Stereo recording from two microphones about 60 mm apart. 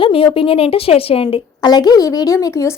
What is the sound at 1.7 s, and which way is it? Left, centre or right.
Speech, left.